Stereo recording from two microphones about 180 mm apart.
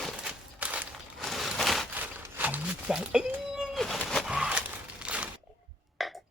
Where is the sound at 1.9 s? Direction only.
10° right (ahead or behind).